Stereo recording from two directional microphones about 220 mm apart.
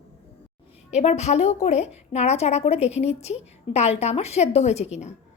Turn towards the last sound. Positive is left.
turn(degrees=30)  # may be behind; listen again after turning